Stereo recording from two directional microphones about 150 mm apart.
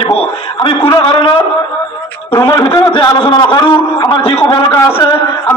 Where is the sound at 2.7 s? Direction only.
35° left (ahead or behind).